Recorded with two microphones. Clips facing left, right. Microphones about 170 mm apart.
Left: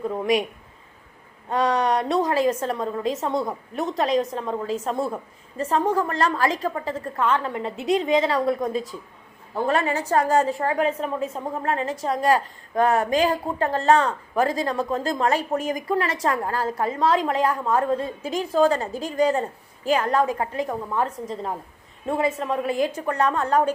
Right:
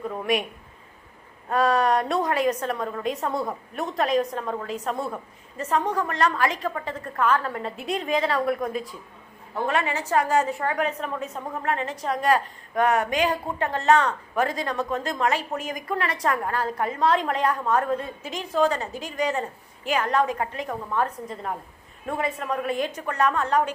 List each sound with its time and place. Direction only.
0.1 s a sound: 20° left (ahead or behind)
1.5 s a woman's voice: 20° left (ahead or behind)
9.6 s a woman's voice: 35° left (ahead or behind)